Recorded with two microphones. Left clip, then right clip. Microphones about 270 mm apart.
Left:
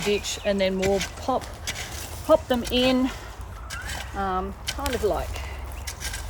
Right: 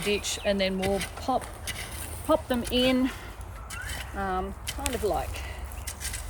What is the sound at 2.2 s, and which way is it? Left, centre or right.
Speech, centre.